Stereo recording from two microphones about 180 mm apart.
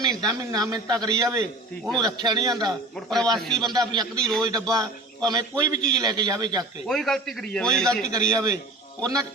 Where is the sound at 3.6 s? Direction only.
20° right (ahead or behind).